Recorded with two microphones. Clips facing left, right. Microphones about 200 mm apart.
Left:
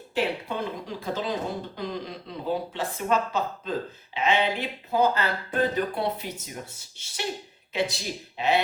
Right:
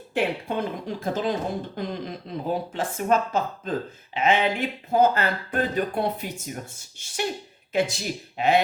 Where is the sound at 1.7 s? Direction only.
50° right (ahead or behind).